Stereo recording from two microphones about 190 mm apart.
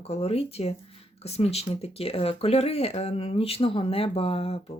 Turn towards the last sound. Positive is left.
turn(degrees=30)  # may be behind; listen again after turning